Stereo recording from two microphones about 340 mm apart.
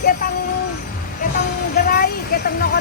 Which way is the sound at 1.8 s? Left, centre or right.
Left.